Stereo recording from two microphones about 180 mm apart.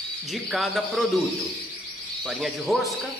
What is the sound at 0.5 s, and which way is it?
Speech, centre (ahead or behind).